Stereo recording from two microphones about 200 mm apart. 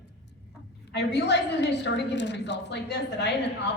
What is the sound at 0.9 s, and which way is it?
A woman's voice, 60° left (ahead or behind).